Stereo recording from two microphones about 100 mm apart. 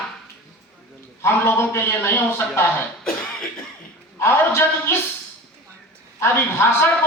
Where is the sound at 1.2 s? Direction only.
25° left (ahead or behind).